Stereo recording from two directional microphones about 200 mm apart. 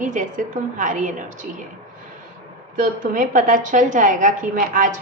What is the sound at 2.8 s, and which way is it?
A woman's voice, 40° right (ahead or behind).